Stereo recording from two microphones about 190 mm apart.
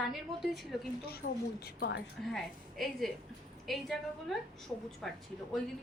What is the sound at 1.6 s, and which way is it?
Speech, 65° left (ahead or behind).